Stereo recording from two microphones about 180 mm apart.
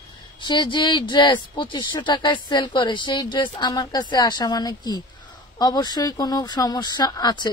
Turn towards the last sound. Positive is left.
turn(degrees=20)  # may be behind; listen again after turning